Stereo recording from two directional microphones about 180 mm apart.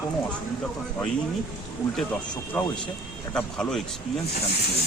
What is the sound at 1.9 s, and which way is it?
Speech, 5° left (ahead or behind).